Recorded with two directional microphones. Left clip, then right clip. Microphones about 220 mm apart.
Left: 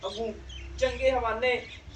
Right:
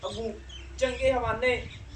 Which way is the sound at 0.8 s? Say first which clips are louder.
Even; 20° right (ahead or behind).